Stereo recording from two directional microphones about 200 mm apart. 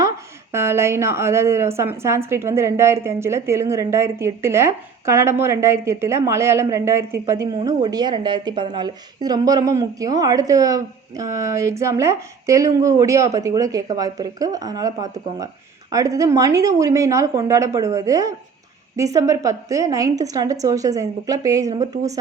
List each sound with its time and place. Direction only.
0.5 s a woman's voice: 15° right (ahead or behind)